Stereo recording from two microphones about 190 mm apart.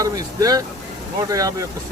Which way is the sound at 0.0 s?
20° right (ahead or behind).